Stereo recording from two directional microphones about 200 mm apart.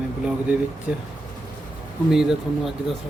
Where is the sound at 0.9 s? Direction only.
5° right (ahead or behind).